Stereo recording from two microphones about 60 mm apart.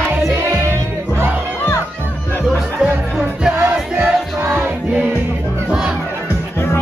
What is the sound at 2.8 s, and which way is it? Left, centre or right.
Music, centre.